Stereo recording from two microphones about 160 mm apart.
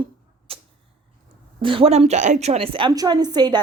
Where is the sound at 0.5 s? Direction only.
35° right (ahead or behind).